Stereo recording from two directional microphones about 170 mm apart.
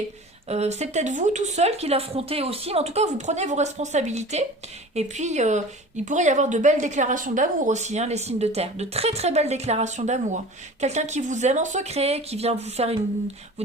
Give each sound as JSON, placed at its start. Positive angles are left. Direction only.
{"t": 0.4, "sound": "speech", "side_deg": -40}